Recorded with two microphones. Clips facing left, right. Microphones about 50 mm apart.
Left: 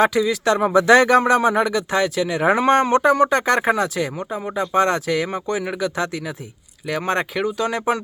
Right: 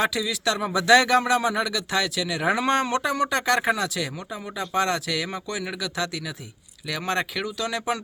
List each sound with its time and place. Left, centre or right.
0.0 s speech: left